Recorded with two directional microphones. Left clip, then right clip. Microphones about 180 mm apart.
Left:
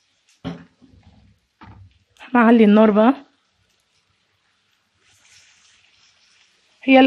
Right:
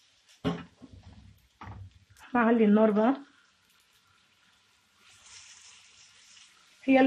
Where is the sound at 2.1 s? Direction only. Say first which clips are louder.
Left 11 dB; 50° left (ahead or behind).